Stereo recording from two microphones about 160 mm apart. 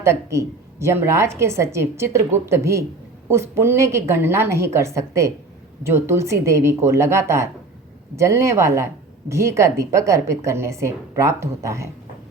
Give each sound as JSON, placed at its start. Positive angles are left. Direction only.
{"t": 0.0, "sound": "a woman's voice", "side_deg": -15}